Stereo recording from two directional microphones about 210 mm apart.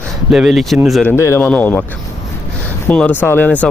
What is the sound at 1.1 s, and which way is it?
Speech, 15° left (ahead or behind).